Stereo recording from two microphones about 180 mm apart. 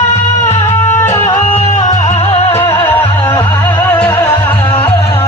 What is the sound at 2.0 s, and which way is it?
Music, 35° left (ahead or behind).